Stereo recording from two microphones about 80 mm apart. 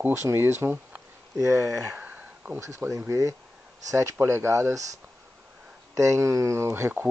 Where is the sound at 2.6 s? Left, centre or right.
Right.